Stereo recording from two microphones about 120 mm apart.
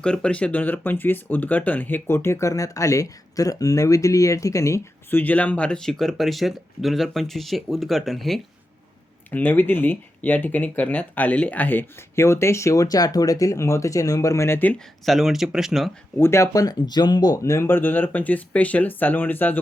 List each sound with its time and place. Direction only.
0.0 s speech: 10° left (ahead or behind); by 5.2 s 25° left (ahead or behind)
5.2 s speech: 15° left (ahead or behind)
9.3 s speech: 15° left (ahead or behind)
15.0 s speech: centre (ahead or behind)
16.1 s speech: 20° left (ahead or behind)